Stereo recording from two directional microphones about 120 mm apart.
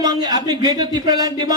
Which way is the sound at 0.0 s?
35° right (ahead or behind).